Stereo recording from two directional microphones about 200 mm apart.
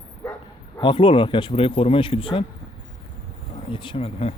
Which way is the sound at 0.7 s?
25° left (ahead or behind).